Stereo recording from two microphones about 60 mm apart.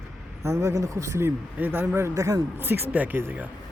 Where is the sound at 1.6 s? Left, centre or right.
Right.